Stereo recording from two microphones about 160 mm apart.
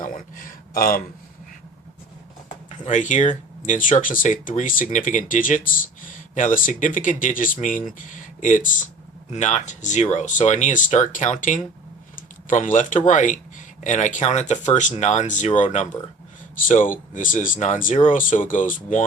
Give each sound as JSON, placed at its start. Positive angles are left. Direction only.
{"t": 0.0, "sound": "a sound", "side_deg": 55}
{"t": 2.6, "sound": "speech", "side_deg": 50}
{"t": 16.9, "sound": "speech", "side_deg": 55}